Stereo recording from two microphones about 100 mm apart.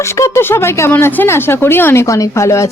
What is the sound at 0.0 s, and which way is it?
Speech, 30° left (ahead or behind).